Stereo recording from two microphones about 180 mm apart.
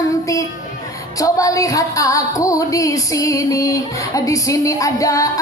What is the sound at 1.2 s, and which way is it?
Music, 20° left (ahead or behind).